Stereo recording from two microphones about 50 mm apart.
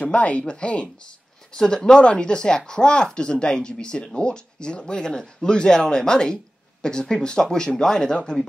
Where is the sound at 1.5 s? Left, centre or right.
Centre.